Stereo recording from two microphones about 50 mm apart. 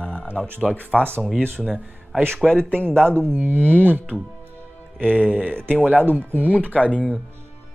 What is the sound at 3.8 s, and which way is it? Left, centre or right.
Speech, right.